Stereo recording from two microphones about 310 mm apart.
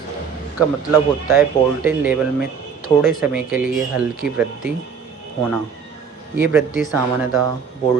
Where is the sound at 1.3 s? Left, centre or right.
Centre.